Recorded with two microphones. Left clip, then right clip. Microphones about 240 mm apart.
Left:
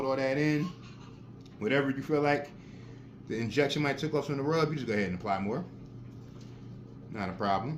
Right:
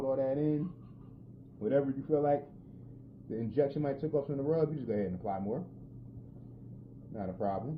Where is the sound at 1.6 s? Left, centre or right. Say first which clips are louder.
Left 2 dB; left.